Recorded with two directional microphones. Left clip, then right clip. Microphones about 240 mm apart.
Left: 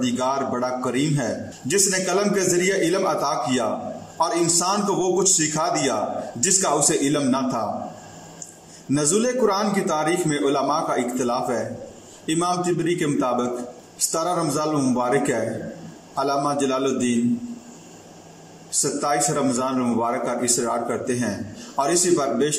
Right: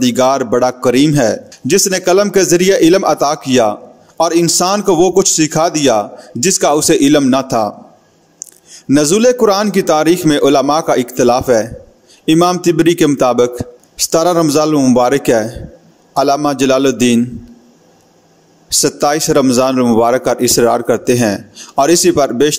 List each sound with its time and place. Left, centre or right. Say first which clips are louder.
0.0 s a man's voice: right 11 dB; right
8.9 s a man's voice: right 11 dB; right
18.7 s a man's voice: right 10 dB; right